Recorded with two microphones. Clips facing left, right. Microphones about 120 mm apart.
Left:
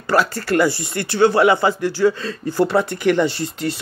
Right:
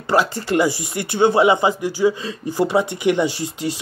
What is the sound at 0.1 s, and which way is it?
Speech, 20° right (ahead or behind).